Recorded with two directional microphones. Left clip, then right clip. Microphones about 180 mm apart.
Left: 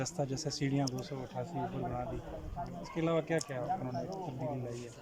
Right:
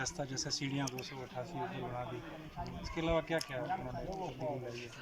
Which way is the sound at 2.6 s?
25° left (ahead or behind).